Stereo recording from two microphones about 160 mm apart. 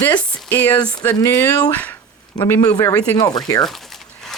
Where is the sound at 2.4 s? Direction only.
25° left (ahead or behind).